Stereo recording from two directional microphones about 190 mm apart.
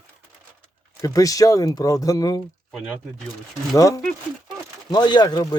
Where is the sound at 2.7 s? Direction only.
Centre (ahead or behind).